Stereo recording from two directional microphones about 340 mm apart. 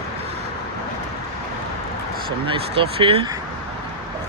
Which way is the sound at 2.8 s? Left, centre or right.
Centre.